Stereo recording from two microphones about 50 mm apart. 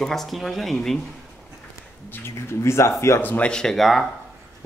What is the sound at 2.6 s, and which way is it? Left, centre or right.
Speech, left.